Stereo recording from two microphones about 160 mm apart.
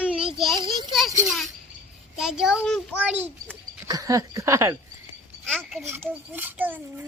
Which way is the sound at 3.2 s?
10° right (ahead or behind).